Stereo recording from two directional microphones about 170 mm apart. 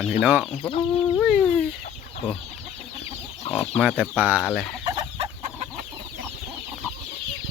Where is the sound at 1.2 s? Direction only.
5° right (ahead or behind).